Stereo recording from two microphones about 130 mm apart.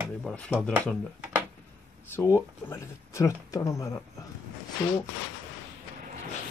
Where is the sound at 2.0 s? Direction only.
20° left (ahead or behind).